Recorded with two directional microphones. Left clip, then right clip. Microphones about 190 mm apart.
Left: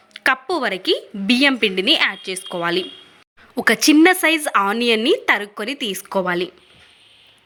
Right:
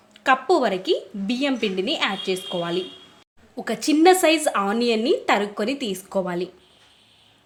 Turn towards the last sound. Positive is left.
turn(degrees=5)  # may be behind; listen again after turning